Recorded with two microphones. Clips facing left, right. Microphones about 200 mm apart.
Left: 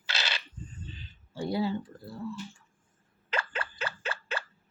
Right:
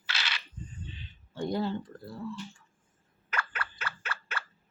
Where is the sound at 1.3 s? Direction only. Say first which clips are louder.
Left 1 dB; 10° left (ahead or behind).